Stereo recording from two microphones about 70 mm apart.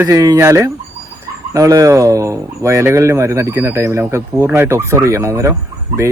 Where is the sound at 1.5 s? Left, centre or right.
Right.